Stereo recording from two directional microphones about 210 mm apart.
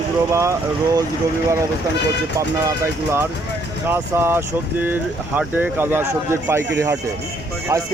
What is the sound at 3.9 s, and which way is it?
A man's voice, 10° right (ahead or behind).